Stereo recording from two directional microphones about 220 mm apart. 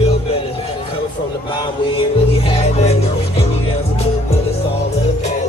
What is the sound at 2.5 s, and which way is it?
Music, 30° left (ahead or behind).